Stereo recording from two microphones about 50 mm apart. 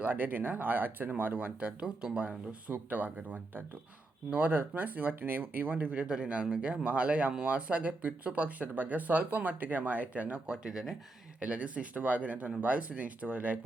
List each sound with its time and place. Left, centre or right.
0.0 s speech: right; by 10.9 s centre
11.3 s speech: right